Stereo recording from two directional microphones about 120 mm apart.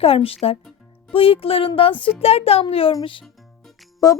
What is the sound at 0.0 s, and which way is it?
Speech, 50° left (ahead or behind).